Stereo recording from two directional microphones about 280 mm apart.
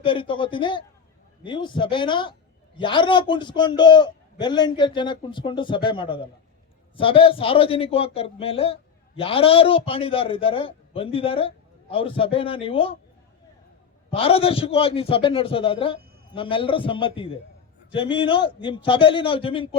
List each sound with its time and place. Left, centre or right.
0.0 s a man's voice: centre
14.1 s a man's voice: centre